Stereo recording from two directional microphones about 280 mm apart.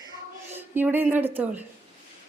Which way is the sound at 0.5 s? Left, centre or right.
Centre.